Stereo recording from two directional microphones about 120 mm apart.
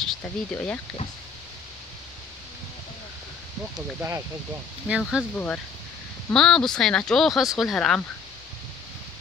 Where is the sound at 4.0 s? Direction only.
20° right (ahead or behind).